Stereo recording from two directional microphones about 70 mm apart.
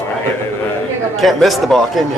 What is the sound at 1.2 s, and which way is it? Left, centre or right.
Speech, centre.